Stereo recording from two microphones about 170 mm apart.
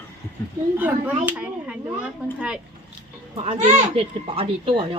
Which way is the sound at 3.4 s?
35° right (ahead or behind).